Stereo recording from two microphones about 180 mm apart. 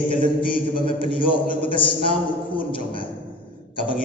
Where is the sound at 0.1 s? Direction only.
30° left (ahead or behind).